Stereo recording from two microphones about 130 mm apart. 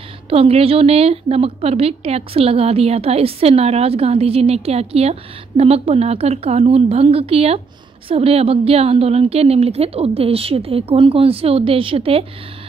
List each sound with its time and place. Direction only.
0.3 s a woman's voice: 50° right (ahead or behind)